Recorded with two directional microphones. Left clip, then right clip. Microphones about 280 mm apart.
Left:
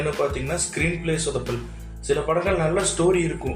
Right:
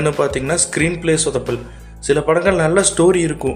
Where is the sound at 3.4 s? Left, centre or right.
Centre.